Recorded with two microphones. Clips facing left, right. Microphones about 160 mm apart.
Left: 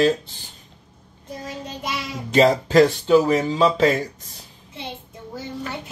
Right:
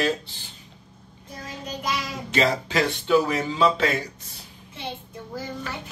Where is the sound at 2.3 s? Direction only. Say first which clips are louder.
Left 8 dB; 40° left (ahead or behind).